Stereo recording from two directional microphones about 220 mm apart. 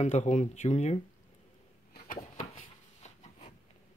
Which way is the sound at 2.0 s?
30° left (ahead or behind).